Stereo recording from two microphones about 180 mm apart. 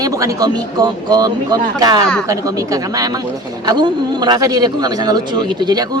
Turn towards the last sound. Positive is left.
turn(degrees=-20)  # may be behind; listen again after turning